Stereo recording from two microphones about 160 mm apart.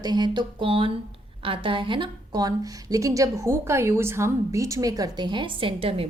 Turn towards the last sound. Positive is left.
turn(degrees=-35)  # may be behind; listen again after turning